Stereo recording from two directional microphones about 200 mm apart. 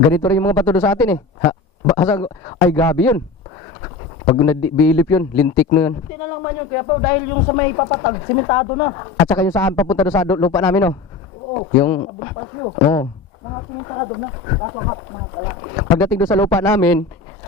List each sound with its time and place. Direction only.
0.1 s a man's voice: 15° left (ahead or behind)
4.4 s a man's voice: 10° left (ahead or behind)
11.9 s a man's voice: 25° left (ahead or behind)